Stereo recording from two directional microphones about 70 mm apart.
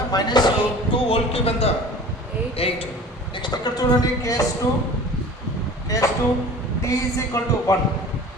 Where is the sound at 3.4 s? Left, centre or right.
Left.